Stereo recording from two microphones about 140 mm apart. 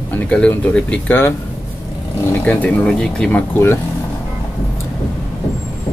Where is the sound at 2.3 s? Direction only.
10° left (ahead or behind).